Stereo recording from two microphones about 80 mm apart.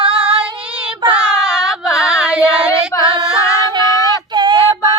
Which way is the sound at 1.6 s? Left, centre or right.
Left.